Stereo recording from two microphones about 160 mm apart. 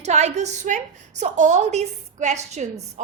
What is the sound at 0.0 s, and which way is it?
A woman's voice, 45° right (ahead or behind).